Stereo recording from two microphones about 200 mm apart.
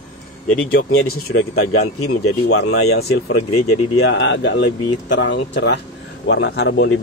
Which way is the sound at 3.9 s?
65° left (ahead or behind).